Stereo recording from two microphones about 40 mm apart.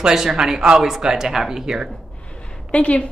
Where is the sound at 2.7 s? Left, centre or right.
Left.